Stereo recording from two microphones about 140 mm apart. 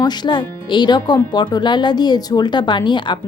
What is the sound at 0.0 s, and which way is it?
A woman's voice, 30° left (ahead or behind).